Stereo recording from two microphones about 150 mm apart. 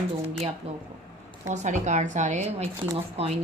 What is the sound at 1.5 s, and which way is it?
A woman's voice, 50° right (ahead or behind).